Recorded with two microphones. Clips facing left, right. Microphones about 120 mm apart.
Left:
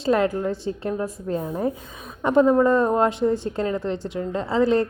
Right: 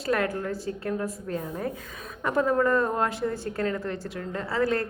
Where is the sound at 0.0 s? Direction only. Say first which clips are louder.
Left 6 dB; 25° left (ahead or behind).